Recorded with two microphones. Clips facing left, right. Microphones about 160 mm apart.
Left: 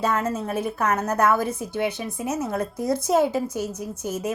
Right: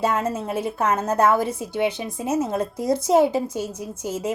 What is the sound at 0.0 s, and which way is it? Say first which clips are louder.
A woman's voice: right 1 dB; 30° right (ahead or behind).